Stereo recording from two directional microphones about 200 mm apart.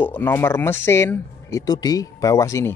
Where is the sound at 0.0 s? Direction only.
10° left (ahead or behind).